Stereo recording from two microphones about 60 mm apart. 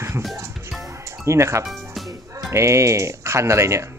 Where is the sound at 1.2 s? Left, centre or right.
Right.